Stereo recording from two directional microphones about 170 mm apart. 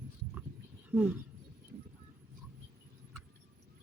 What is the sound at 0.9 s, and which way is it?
Speech, 10° right (ahead or behind).